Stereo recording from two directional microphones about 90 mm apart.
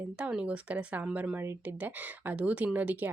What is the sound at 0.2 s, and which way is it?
A woman's voice, 10° right (ahead or behind).